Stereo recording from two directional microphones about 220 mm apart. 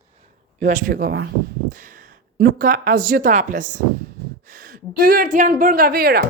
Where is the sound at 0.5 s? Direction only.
35° right (ahead or behind).